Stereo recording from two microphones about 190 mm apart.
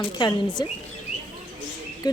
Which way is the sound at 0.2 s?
25° left (ahead or behind).